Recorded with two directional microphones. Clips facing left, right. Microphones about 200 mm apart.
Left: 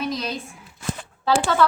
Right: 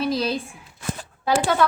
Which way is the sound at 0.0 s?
30° right (ahead or behind).